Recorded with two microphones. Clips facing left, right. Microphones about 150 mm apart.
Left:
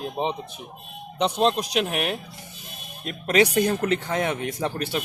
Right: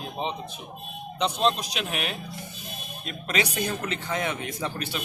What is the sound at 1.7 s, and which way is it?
Speech, 55° left (ahead or behind).